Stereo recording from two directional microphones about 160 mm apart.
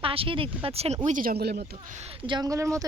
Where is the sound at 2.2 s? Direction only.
25° right (ahead or behind).